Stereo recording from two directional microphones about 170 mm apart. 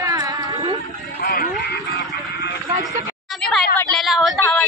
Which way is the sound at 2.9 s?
Centre (ahead or behind).